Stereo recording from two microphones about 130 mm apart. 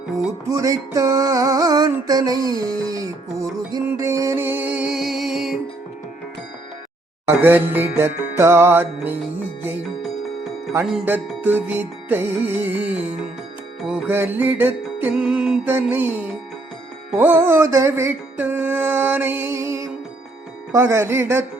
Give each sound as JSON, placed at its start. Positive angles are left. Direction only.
{"t": 0.4, "sound": "music", "side_deg": -25}
{"t": 7.3, "sound": "music", "side_deg": -15}
{"t": 11.1, "sound": "music", "side_deg": -15}